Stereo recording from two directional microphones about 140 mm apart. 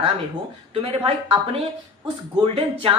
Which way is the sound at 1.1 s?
45° right (ahead or behind).